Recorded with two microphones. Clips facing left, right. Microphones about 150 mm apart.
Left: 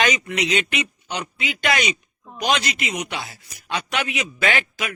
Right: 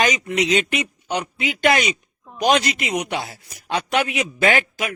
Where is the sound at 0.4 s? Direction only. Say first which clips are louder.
Right 2 dB; 40° right (ahead or behind).